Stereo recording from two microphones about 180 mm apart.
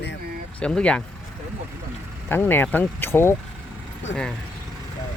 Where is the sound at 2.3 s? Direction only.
10° left (ahead or behind).